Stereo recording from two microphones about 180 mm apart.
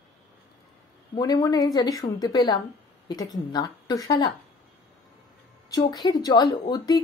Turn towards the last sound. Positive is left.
turn(degrees=25)  # may be behind; listen again after turning